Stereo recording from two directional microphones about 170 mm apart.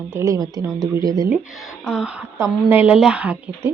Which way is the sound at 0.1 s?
15° right (ahead or behind).